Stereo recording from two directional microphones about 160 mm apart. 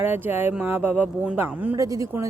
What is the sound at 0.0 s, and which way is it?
Speech, 15° right (ahead or behind).